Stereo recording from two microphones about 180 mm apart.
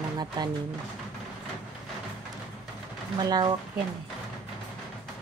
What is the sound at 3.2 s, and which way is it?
Speech, 20° right (ahead or behind).